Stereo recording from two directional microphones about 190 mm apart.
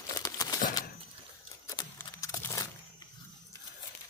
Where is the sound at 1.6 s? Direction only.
20° left (ahead or behind).